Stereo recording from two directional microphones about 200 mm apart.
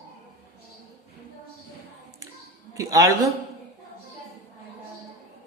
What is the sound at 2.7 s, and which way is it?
Speech, 15° right (ahead or behind).